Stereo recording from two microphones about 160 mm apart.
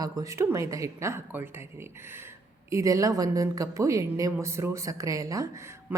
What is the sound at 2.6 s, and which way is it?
A woman's voice, 20° right (ahead or behind).